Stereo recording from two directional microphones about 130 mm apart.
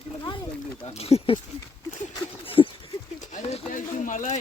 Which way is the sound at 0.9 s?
50° left (ahead or behind).